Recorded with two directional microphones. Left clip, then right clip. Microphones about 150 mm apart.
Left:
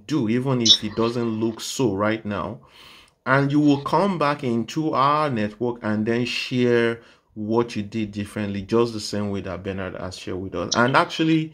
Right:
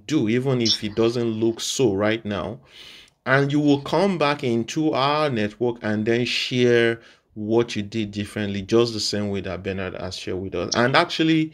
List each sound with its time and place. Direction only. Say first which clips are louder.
0.1 s speech: right 2 dB; 35° right (ahead or behind)
0.6 s speech: left 5 dB; 5° left (ahead or behind)
0.9 s speech: right 2 dB; 30° right (ahead or behind)